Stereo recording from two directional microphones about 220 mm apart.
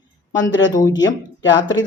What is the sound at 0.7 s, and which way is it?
Speech, 15° left (ahead or behind).